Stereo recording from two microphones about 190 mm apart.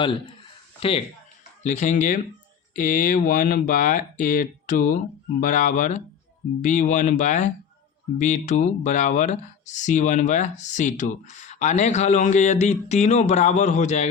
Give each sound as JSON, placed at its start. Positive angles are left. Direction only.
{"t": 0.8, "sound": "speech", "side_deg": 30}